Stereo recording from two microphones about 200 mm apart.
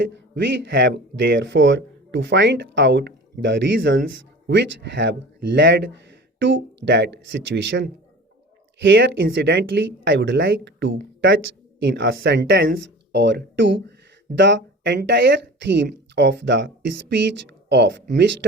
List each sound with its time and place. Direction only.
0.0 s speech: 65° right (ahead or behind)